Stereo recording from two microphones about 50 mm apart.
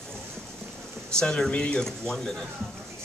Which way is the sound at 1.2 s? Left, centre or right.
Centre.